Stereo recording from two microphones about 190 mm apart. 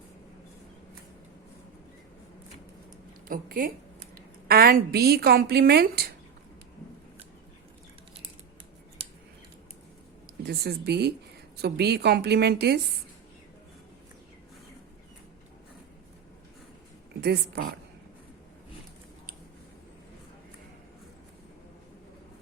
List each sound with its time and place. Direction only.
3.2 s a woman's voice: 45° right (ahead or behind)
10.4 s a woman's voice: 55° right (ahead or behind)
17.2 s a woman's voice: 55° right (ahead or behind)